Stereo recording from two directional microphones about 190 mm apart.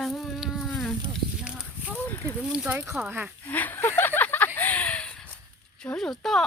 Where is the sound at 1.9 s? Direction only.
10° left (ahead or behind).